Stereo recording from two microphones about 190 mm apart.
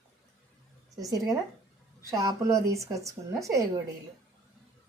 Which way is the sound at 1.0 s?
20° right (ahead or behind).